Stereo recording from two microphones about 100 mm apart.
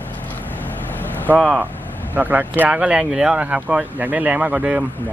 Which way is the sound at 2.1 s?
15° right (ahead or behind).